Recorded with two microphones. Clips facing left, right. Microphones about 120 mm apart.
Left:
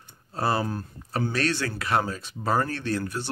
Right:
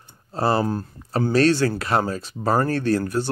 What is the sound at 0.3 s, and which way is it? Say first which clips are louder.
Speech: right 5 dB; 30° right (ahead or behind).